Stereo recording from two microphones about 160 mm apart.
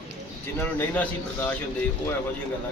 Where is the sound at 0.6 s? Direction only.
15° left (ahead or behind).